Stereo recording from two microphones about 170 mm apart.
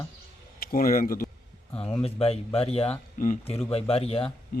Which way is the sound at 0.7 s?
55° left (ahead or behind).